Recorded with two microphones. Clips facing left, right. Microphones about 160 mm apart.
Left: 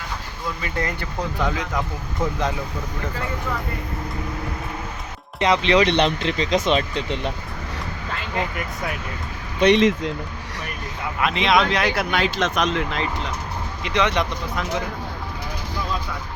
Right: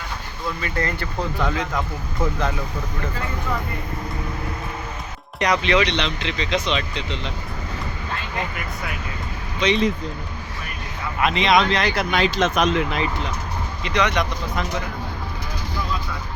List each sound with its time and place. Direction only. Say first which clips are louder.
0.6 s speech: right 1 dB; 15° left (ahead or behind)
5.4 s speech: left 2 dB; 25° left (ahead or behind)
5.8 s speech: left 5 dB; 50° left (ahead or behind)
9.6 s speech: left 4 dB; 65° left (ahead or behind)
11.2 s speech: right 1 dB; centre (ahead or behind)
13.8 s speech: even; 25° left (ahead or behind)